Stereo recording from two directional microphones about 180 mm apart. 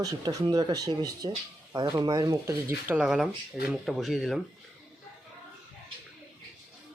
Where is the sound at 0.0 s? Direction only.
20° right (ahead or behind); by 4.4 s centre (ahead or behind).